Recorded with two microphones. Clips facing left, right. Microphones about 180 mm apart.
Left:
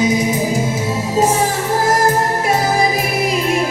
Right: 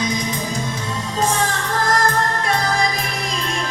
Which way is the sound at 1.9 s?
10° left (ahead or behind).